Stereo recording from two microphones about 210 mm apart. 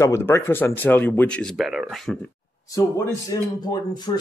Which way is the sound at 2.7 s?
15° left (ahead or behind).